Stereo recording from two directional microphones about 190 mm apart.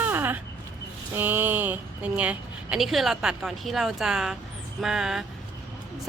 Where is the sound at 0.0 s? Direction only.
10° right (ahead or behind).